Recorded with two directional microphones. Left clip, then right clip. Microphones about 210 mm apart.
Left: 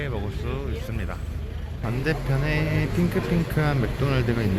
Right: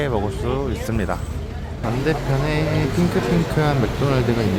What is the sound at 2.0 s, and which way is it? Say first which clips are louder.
Speech: right 4 dB; centre (ahead or behind).